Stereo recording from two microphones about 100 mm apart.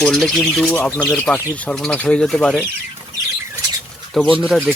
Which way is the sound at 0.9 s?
15° left (ahead or behind).